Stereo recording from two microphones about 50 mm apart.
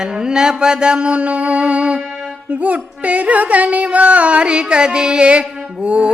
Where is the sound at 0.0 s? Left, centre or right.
Centre.